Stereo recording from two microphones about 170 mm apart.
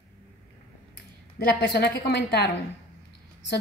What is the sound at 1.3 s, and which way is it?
A woman's voice, 75° left (ahead or behind).